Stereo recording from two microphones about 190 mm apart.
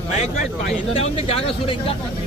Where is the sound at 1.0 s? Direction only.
30° left (ahead or behind).